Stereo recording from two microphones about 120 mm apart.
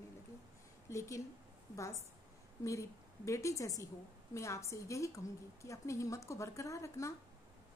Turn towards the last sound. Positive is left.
turn(degrees=25)  # may be behind; listen again after turning